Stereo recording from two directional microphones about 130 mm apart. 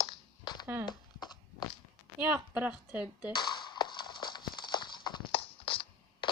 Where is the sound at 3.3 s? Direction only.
35° left (ahead or behind).